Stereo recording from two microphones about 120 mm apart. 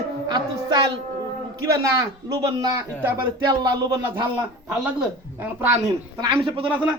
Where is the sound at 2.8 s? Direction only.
20° right (ahead or behind).